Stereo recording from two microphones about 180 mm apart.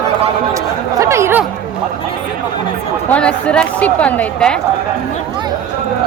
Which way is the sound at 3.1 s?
5° left (ahead or behind).